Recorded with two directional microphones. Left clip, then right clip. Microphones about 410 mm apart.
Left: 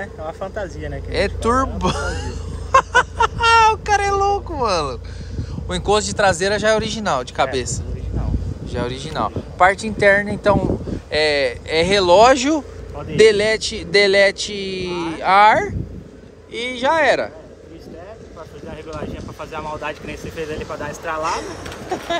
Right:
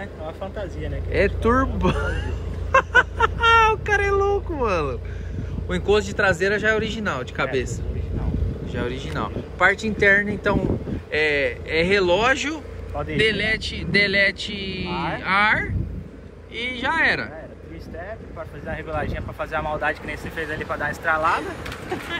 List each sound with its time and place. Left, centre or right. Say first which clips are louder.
0.2 s speech: left 4 dB; left
1.1 s a sound: left 1 dB; centre
5.7 s speech: left 2 dB; centre
8.7 s speech: left 5 dB; centre
18.7 s speech: right 3 dB; centre